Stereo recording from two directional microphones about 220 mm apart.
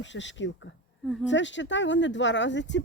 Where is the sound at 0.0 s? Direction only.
55° left (ahead or behind).